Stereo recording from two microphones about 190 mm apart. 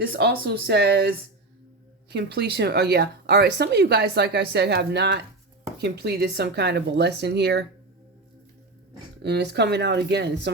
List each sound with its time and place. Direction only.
0.0 s speech: 55° right (ahead or behind)
9.2 s speech: 60° right (ahead or behind)